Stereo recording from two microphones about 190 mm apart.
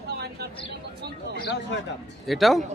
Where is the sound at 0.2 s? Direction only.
60° right (ahead or behind).